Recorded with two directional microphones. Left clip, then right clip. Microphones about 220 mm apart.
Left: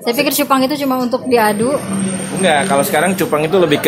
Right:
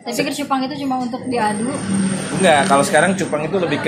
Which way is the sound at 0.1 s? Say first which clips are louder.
Left 6 dB; 45° left (ahead or behind).